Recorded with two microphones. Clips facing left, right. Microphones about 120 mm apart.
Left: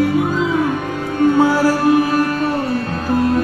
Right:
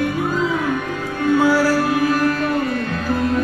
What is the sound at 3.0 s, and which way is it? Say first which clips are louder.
Music: left 4 dB; 40° left (ahead or behind).